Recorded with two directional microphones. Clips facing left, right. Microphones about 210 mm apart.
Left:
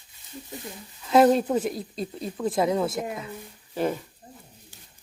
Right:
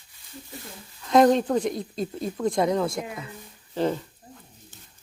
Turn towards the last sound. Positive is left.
turn(degrees=10)  # may be behind; listen again after turning